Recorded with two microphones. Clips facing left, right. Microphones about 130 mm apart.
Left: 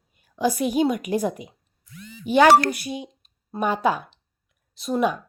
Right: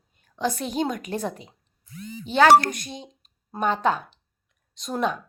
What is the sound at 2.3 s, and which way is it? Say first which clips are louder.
A woman's voice: left 1 dB; 10° left (ahead or behind).